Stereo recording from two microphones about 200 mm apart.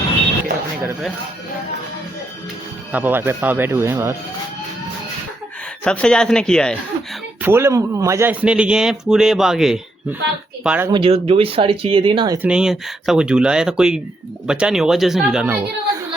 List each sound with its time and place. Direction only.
2.9 s speech: 10° right (ahead or behind)
5.8 s speech: 5° left (ahead or behind)
7.4 s speech: 10° right (ahead or behind)
10.9 s speech: 25° right (ahead or behind)
12.4 s speech: 5° right (ahead or behind)